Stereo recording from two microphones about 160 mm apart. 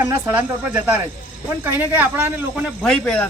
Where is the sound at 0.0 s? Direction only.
10° right (ahead or behind).